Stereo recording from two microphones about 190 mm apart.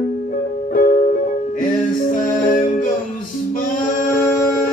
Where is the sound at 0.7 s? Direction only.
45° left (ahead or behind).